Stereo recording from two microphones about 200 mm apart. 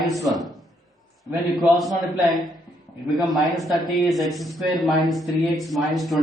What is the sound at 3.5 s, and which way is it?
A woman's voice, centre (ahead or behind).